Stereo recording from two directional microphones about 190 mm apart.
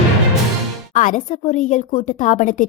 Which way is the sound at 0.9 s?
45° left (ahead or behind).